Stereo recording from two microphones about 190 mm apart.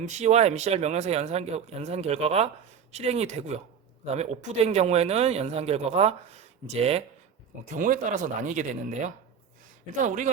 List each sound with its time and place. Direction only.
0.0 s speech: 40° right (ahead or behind)
7.7 s speech: 45° right (ahead or behind)